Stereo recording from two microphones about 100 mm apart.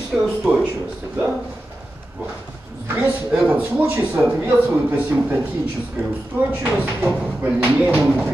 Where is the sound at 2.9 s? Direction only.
20° right (ahead or behind).